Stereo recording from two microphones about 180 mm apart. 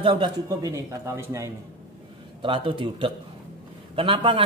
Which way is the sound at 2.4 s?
30° right (ahead or behind).